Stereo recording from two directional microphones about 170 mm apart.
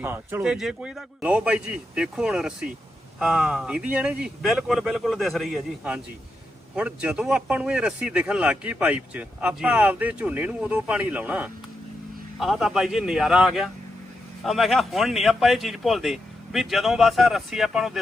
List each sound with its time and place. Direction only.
0.0 s speech: 10° right (ahead or behind)
0.4 s a man's voice: centre (ahead or behind)